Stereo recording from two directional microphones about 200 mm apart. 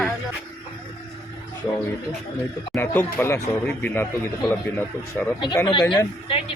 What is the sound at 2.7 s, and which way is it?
A man's voice, 10° left (ahead or behind).